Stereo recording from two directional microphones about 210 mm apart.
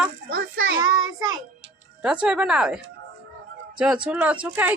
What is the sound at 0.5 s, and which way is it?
Child singing, 65° right (ahead or behind).